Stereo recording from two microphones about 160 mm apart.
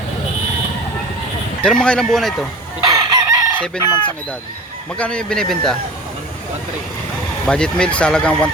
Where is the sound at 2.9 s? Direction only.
20° right (ahead or behind).